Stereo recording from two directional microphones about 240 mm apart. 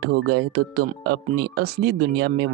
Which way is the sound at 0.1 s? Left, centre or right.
Right.